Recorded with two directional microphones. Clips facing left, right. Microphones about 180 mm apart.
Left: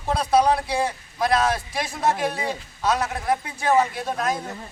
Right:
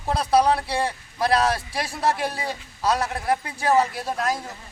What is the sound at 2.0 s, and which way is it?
Speech, 35° right (ahead or behind).